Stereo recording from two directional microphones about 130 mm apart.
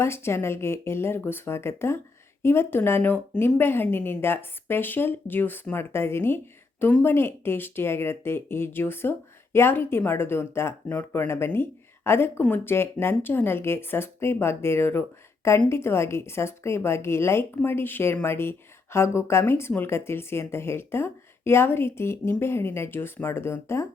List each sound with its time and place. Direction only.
0.0 s a woman's voice: 20° left (ahead or behind)